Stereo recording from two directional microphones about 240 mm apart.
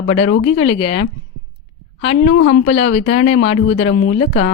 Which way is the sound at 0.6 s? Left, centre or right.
Left.